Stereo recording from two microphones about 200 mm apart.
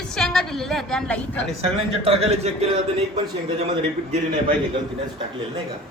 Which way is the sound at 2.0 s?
30° right (ahead or behind).